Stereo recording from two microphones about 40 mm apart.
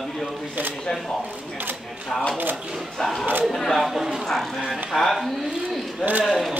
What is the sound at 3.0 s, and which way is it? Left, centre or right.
Speech, centre.